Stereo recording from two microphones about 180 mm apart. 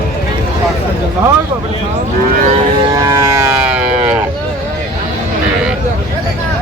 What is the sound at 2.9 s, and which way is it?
Cattle, 15° right (ahead or behind).